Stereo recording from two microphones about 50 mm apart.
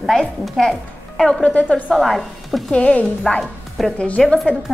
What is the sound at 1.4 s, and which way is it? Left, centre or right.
Speech, left.